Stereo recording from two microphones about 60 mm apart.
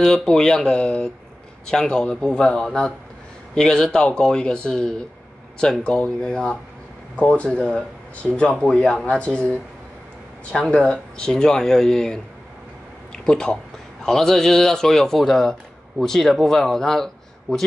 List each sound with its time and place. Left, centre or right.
0.0 s speech: centre
10.5 s speech: centre
13.1 s a sound: centre
14.0 s speech: centre